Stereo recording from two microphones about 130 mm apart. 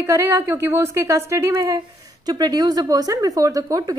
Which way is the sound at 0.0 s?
20° right (ahead or behind).